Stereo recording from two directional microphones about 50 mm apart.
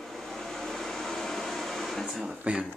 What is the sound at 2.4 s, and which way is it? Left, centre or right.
Speech, centre.